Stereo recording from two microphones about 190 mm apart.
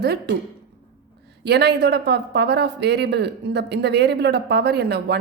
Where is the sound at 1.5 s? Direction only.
60° right (ahead or behind).